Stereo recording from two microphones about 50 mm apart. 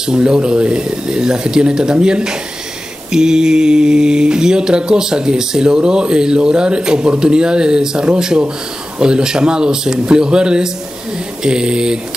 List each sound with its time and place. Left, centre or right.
0.0 s mantra: centre